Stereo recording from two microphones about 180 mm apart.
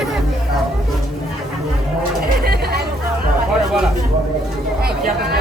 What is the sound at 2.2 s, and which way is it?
Chatter, 60° right (ahead or behind).